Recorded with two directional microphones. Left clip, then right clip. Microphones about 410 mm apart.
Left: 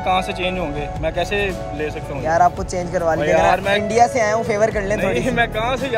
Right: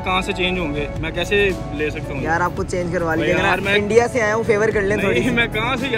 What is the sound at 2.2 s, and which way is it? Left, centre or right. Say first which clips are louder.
Speech: left 5 dB; centre.